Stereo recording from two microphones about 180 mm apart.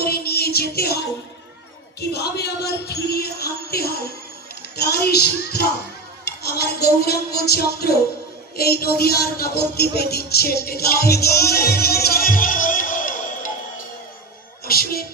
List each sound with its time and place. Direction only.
0.0 s music: 60° left (ahead or behind)
6.3 s a sound: 65° left (ahead or behind)
6.6 s music: 60° left (ahead or behind)
8.5 s speech: 60° left (ahead or behind)
14.6 s music: 55° left (ahead or behind)